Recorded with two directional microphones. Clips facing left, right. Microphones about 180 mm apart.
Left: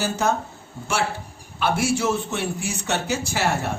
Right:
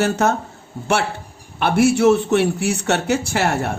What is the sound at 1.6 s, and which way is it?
A man's voice, 60° right (ahead or behind).